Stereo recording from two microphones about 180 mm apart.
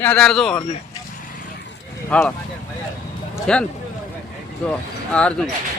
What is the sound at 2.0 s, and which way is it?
Speech, 10° left (ahead or behind).